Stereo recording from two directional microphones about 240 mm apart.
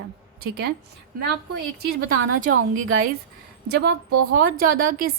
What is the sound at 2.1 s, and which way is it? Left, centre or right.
A woman's voice, right.